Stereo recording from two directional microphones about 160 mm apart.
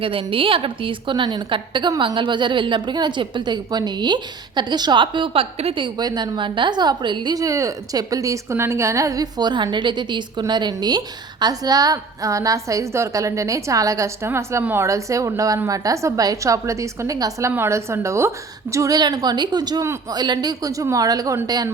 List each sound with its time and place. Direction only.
0.0 s a woman's voice: 35° right (ahead or behind)